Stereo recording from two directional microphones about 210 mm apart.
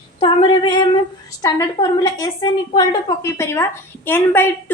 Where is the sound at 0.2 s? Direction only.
25° left (ahead or behind).